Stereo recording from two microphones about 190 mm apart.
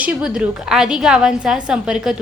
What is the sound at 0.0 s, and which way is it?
A woman's voice, 5° right (ahead or behind).